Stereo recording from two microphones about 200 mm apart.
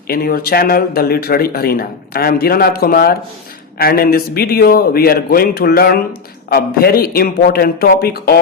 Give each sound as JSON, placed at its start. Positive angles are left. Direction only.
{"t": 0.1, "sound": "speech", "side_deg": 50}